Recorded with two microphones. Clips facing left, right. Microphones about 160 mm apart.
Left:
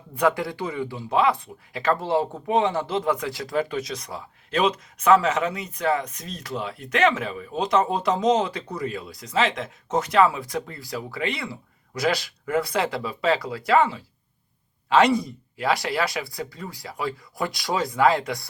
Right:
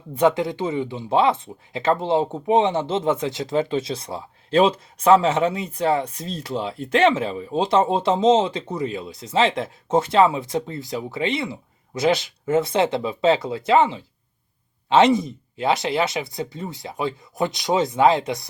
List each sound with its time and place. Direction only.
0.1 s speech: 20° right (ahead or behind)